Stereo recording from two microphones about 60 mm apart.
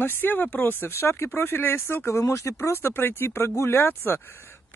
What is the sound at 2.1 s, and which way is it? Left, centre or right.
Speech, left.